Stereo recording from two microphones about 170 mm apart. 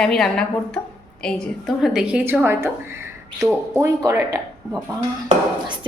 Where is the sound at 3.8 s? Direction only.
15° right (ahead or behind).